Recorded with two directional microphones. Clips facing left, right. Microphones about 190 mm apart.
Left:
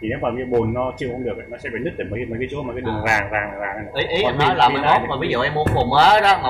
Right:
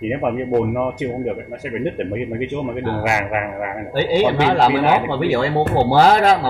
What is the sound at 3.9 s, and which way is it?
Speech, 45° right (ahead or behind).